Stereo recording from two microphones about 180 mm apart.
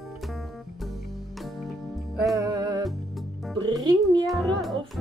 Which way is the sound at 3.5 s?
25° right (ahead or behind).